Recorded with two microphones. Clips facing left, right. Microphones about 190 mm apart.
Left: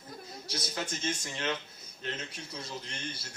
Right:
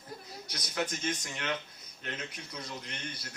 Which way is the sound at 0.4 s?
25° left (ahead or behind).